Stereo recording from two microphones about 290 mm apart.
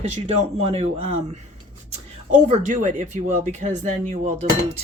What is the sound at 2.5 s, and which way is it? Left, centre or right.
Speech, right.